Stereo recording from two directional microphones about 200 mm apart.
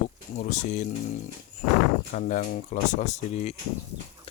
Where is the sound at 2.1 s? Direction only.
35° left (ahead or behind).